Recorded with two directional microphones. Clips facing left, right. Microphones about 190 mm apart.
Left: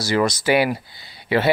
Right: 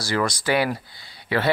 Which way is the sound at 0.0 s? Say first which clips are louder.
Left 4 dB; 20° left (ahead or behind).